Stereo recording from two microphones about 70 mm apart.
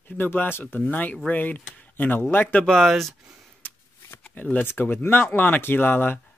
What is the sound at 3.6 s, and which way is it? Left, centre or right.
Shuffling cards, left.